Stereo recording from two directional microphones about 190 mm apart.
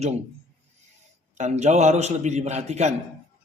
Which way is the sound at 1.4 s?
35° right (ahead or behind).